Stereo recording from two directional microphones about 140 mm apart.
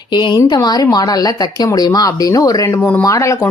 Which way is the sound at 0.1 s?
30° left (ahead or behind).